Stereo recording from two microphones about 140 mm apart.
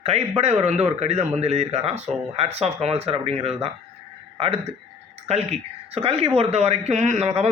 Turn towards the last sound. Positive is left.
turn(degrees=-50)  # may be behind; listen again after turning